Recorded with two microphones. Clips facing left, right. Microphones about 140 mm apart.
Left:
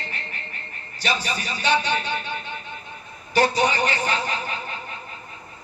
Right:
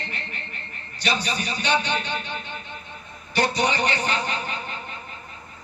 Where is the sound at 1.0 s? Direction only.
45° left (ahead or behind).